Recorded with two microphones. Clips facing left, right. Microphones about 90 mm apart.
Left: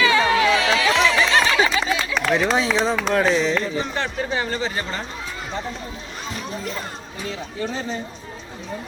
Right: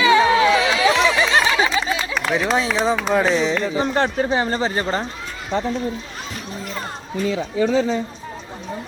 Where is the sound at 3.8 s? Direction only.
40° right (ahead or behind).